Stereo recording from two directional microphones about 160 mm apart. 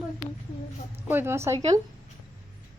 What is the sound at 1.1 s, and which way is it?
Speech, 15° right (ahead or behind).